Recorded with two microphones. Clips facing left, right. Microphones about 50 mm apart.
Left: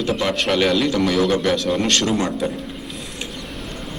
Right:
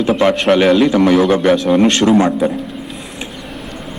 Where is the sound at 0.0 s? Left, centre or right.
Right.